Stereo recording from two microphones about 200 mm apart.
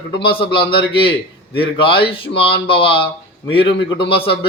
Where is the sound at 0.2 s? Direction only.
25° left (ahead or behind).